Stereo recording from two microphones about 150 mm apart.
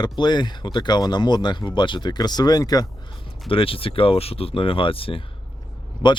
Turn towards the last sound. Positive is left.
turn(degrees=35)  # may be behind; listen again after turning